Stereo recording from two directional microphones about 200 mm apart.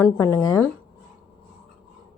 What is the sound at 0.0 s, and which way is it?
Speech, 10° left (ahead or behind).